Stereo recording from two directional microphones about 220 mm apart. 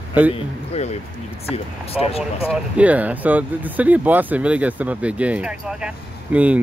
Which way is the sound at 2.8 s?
5° right (ahead or behind).